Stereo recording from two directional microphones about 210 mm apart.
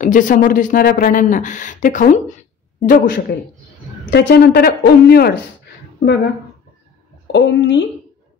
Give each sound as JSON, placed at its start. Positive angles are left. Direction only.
{"t": 0.0, "sound": "speech", "side_deg": 40}
{"t": 7.3, "sound": "speech", "side_deg": 55}